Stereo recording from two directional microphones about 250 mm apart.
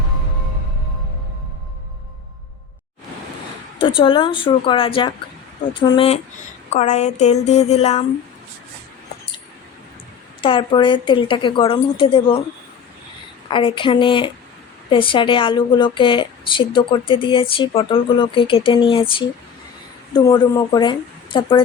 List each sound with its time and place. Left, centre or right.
3.8 s a woman's voice: centre
10.4 s a woman's voice: centre
13.5 s a woman's voice: left
20.1 s speech: centre